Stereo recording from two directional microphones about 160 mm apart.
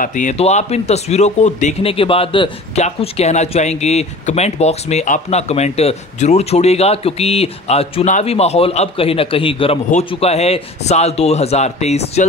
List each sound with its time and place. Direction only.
0.0 s speech: 50° left (ahead or behind)